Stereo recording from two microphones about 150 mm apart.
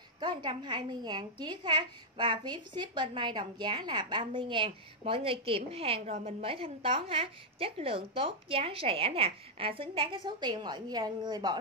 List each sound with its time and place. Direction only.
0.2 s a woman's voice: 30° right (ahead or behind)